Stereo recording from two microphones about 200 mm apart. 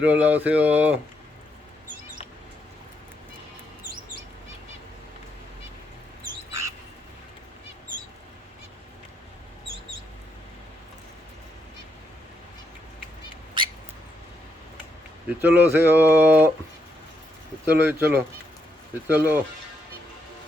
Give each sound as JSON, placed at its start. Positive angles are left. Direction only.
{"t": 0.0, "sound": "speech", "side_deg": -5}
{"t": 6.2, "sound": "bird", "side_deg": -15}
{"t": 15.4, "sound": "speech", "side_deg": -10}
{"t": 17.7, "sound": "speech", "side_deg": -10}